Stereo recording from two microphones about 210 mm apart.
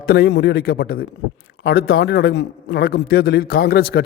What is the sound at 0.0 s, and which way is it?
A man's voice, 45° left (ahead or behind).